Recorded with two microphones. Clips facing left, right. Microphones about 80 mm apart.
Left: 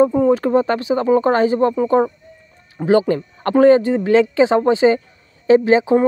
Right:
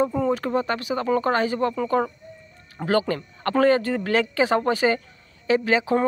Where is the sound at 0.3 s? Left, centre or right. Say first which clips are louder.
Left 8 dB; left.